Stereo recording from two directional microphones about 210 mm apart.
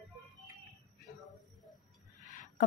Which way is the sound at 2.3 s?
40° left (ahead or behind).